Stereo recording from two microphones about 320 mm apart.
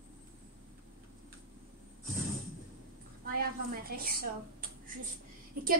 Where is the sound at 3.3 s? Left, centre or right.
Right.